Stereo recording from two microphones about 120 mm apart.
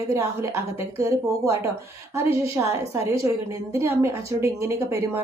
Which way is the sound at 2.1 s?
25° right (ahead or behind).